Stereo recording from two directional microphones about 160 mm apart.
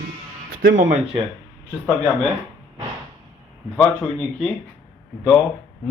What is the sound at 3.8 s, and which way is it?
Speech, 5° left (ahead or behind).